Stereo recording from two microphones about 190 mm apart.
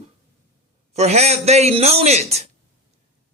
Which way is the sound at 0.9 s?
35° right (ahead or behind).